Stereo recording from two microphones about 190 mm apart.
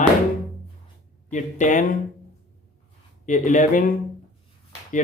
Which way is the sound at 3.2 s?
40° left (ahead or behind).